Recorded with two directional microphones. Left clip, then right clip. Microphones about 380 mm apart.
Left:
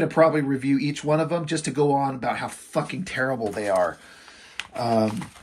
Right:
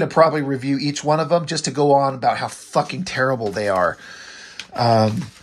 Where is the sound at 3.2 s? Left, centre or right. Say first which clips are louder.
Right 5 dB; right.